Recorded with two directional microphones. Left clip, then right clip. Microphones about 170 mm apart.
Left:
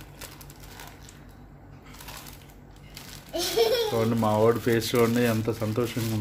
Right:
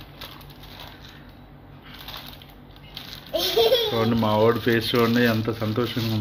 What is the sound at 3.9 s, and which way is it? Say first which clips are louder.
Speech: right 3 dB; 5° left (ahead or behind).